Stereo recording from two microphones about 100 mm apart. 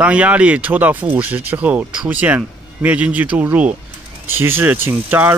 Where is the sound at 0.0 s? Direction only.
15° right (ahead or behind).